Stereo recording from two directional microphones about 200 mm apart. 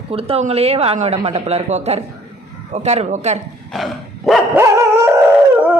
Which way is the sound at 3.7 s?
Centre (ahead or behind).